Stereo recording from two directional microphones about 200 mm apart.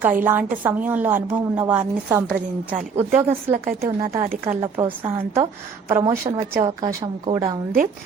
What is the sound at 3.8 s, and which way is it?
A woman's voice, 15° right (ahead or behind).